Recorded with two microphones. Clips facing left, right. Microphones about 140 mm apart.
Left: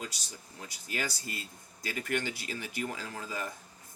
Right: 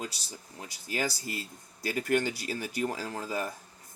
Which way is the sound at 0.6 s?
25° right (ahead or behind).